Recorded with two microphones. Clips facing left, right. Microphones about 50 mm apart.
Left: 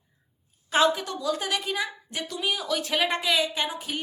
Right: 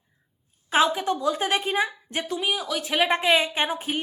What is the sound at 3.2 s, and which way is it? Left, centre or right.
Speech, right.